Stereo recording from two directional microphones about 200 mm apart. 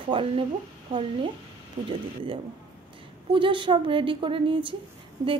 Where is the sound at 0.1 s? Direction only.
25° right (ahead or behind).